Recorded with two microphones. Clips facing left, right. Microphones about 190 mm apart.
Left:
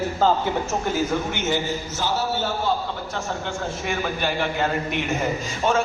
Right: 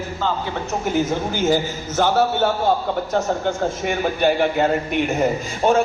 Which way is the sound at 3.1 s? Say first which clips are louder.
Right 9 dB; 40° right (ahead or behind).